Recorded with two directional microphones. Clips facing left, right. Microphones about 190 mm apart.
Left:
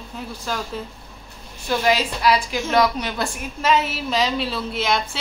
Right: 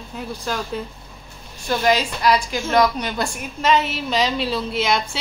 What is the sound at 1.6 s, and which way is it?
A woman's voice, 5° left (ahead or behind).